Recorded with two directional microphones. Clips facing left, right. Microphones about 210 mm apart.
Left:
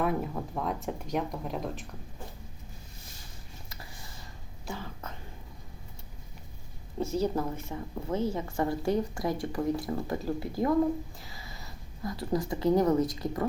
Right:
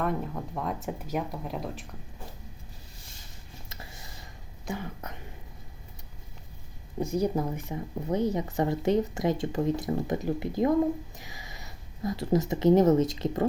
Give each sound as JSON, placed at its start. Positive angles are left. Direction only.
{"t": 0.0, "sound": "speech", "side_deg": 5}
{"t": 4.6, "sound": "a woman's voice", "side_deg": -20}
{"t": 7.0, "sound": "a woman's voice", "side_deg": -15}